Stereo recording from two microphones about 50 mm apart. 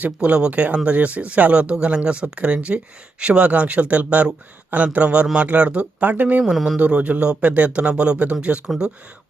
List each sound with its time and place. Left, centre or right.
0.0 s speech: right
6.4 s speech: centre
6.7 s speech: right